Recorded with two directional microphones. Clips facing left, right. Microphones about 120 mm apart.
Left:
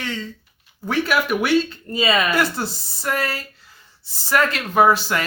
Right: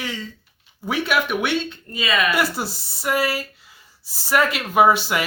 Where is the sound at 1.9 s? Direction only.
30° left (ahead or behind).